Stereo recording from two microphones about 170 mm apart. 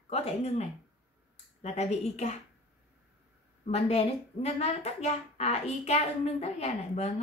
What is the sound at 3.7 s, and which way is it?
Speech, 40° left (ahead or behind).